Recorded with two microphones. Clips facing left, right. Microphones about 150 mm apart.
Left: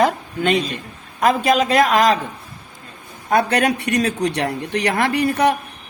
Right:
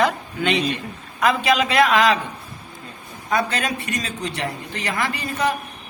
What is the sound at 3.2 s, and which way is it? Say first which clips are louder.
Speech: left 6 dB; 60° left (ahead or behind).